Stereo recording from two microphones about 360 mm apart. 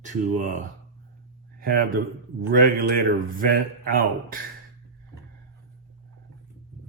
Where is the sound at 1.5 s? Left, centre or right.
Right.